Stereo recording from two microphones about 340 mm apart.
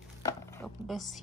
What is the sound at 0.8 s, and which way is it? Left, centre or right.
Speech, centre.